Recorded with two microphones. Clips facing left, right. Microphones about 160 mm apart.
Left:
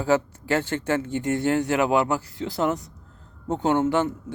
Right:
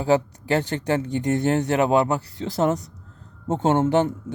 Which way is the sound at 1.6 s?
35° right (ahead or behind).